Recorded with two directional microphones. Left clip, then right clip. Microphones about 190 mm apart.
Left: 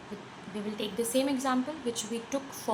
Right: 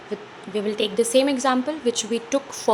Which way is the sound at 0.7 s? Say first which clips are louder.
Right 11 dB; 35° right (ahead or behind).